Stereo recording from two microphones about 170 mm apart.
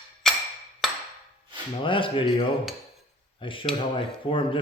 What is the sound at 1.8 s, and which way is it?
Speech, 30° left (ahead or behind).